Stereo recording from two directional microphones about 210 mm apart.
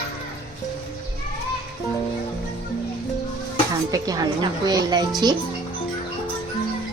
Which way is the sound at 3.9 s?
15° right (ahead or behind).